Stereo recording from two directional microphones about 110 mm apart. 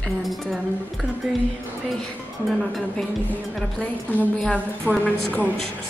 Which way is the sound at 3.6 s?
15° left (ahead or behind).